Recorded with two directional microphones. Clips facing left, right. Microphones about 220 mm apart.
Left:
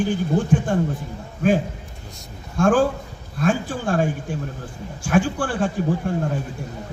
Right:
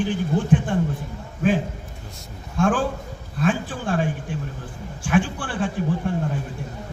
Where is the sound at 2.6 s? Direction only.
45° left (ahead or behind).